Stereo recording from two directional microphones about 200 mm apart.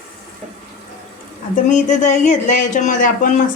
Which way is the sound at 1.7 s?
35° left (ahead or behind).